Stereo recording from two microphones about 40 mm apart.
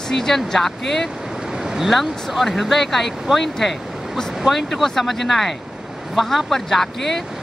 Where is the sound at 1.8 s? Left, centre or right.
Centre.